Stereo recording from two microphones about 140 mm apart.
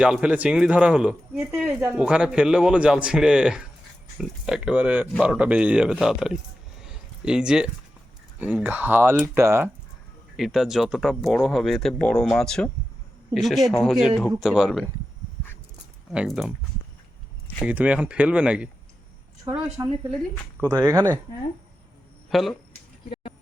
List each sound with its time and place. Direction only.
0.0 s speech: 5° right (ahead or behind)
6.8 s a sound: 5° right (ahead or behind)
8.4 s speech: 10° right (ahead or behind)
10.3 s speech: centre (ahead or behind)
16.1 s speech: 5° right (ahead or behind)
17.7 s speech: 10° right (ahead or behind)
19.5 s speech: 25° right (ahead or behind)
20.7 s speech: 20° right (ahead or behind)
22.3 s speech: centre (ahead or behind)
23.0 s a sound: 40° left (ahead or behind)